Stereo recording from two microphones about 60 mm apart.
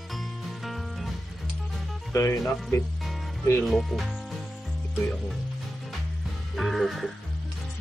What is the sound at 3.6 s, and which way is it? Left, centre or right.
Speech, centre.